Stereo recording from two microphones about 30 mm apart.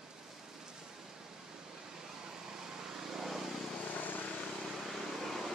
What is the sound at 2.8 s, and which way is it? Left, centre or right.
Vehicle, centre.